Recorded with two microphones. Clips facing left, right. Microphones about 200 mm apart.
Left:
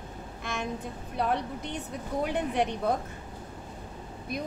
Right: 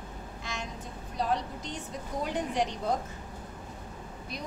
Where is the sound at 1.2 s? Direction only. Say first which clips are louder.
Left 2 dB; 60° left (ahead or behind).